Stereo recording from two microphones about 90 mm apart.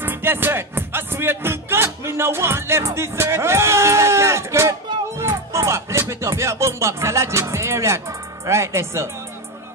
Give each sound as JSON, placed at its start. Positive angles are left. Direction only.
{"t": 0.0, "sound": "speech", "side_deg": -25}